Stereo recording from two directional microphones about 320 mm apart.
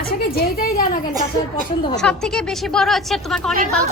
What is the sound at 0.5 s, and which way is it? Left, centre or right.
Speech, left.